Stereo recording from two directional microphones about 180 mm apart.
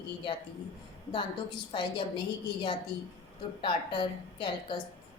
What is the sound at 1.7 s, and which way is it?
Speech, 25° left (ahead or behind).